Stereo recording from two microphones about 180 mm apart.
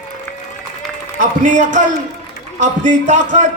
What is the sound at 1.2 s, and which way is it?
A man's voice, 45° right (ahead or behind).